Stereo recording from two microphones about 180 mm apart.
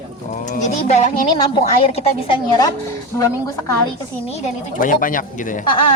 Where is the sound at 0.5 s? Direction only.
40° left (ahead or behind); by 2.7 s 25° left (ahead or behind).